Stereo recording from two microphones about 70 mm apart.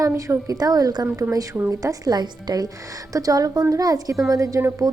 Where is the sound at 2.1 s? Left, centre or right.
Right.